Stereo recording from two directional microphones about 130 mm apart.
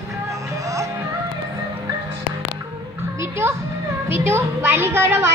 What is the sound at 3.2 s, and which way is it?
Music, 20° right (ahead or behind).